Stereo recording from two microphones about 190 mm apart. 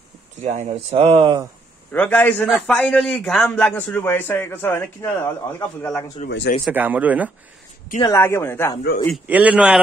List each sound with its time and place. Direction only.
0.4 s speech: 35° right (ahead or behind)
1.9 s a man's voice: 10° left (ahead or behind)
6.2 s speech: 60° left (ahead or behind)
6.6 s speech: 10° right (ahead or behind)
8.0 s a man's voice: 15° left (ahead or behind)
9.3 s speech: 5° right (ahead or behind)